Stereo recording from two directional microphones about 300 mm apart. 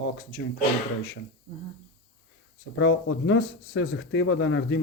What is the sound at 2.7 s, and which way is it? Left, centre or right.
Speech, left.